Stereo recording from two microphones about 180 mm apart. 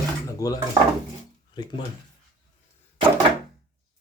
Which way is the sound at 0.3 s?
20° left (ahead or behind).